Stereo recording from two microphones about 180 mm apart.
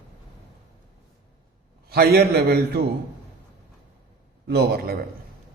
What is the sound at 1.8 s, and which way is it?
A man's voice, 60° right (ahead or behind).